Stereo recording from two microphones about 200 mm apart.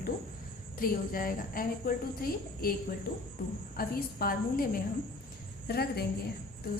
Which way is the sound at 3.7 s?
50° left (ahead or behind).